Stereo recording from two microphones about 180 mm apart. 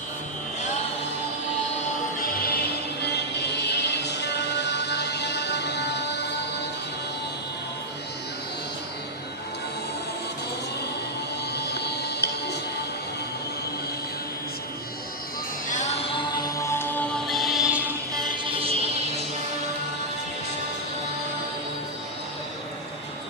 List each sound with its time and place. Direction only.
3.0 s music: 70° left (ahead or behind)
11.5 s music: 65° left (ahead or behind)
15.7 s music: 40° left (ahead or behind)
16.6 s music: 15° left (ahead or behind); by 17.9 s 10° right (ahead or behind)
18.1 s music: 25° right (ahead or behind)